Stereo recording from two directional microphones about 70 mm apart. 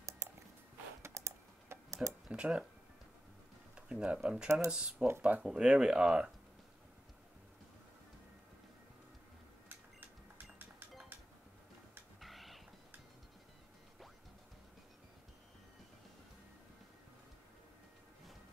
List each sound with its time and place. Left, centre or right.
1.0 s typing: right
2.3 s speech: centre
3.7 s speech: centre
4.9 s speech: right
5.2 s speech: centre
9.7 s camera: right
12.2 s a sound: centre